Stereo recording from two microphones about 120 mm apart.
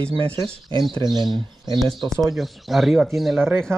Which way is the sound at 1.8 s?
Centre (ahead or behind).